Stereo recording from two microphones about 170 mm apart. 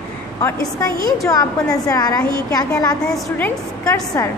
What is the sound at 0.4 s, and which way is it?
A woman's voice, 15° left (ahead or behind).